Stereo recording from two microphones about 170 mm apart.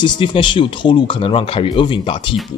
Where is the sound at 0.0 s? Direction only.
30° left (ahead or behind).